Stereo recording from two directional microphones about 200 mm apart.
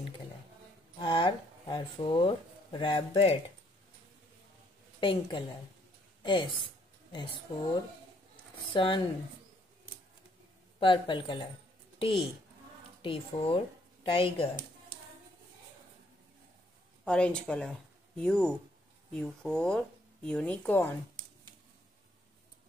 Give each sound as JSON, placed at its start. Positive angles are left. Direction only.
{"t": 0.9, "sound": "speech", "side_deg": 25}
{"t": 5.0, "sound": "a woman's voice", "side_deg": 25}
{"t": 8.7, "sound": "speech", "side_deg": 25}
{"t": 10.8, "sound": "speech", "side_deg": 25}
{"t": 13.0, "sound": "speech", "side_deg": 25}
{"t": 17.0, "sound": "a woman's voice", "side_deg": 5}